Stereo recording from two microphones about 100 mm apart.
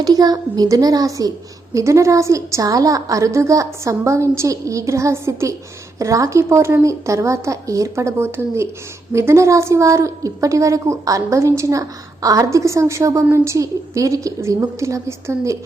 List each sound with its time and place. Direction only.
0.0 s a woman's voice: 40° right (ahead or behind)